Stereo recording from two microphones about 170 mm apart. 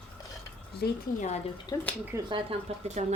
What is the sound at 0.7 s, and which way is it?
Speech, 70° left (ahead or behind).